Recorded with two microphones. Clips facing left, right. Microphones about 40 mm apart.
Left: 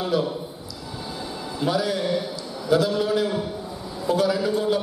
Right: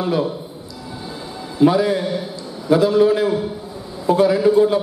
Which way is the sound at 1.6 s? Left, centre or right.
Right.